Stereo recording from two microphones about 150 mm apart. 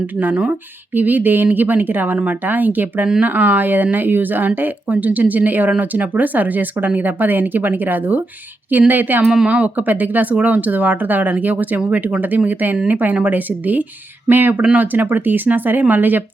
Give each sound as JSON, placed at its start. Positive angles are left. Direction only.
{"t": 0.2, "sound": "speech", "side_deg": -10}